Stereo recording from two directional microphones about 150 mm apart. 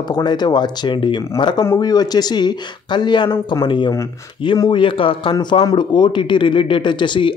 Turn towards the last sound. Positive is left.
turn(degrees=30)  # may be behind; listen again after turning